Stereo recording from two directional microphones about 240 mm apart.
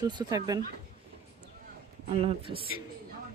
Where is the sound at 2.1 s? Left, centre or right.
Right.